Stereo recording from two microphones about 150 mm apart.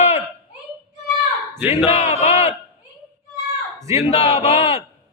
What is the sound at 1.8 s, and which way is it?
Speech, 40° left (ahead or behind).